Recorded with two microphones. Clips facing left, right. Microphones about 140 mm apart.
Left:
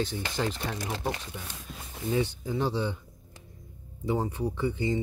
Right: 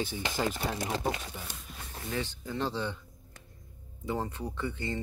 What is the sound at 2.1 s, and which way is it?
Speech, 15° left (ahead or behind).